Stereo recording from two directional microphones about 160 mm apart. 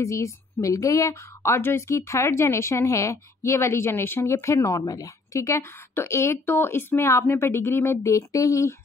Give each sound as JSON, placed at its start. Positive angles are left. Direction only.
{"t": 0.0, "sound": "a woman's voice", "side_deg": 20}